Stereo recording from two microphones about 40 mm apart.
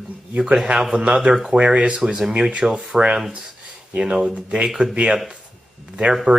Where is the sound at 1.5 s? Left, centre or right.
Right.